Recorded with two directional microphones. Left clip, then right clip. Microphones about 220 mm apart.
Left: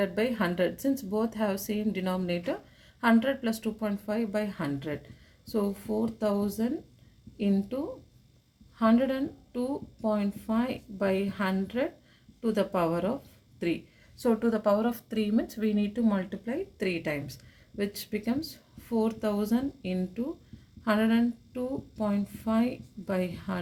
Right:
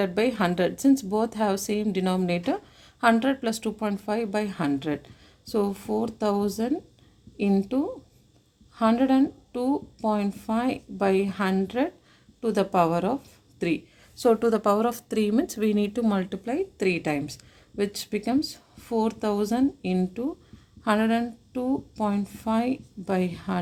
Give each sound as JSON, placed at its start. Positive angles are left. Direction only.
{"t": 0.0, "sound": "a woman's voice", "side_deg": -45}
{"t": 14.2, "sound": "a woman's voice", "side_deg": -45}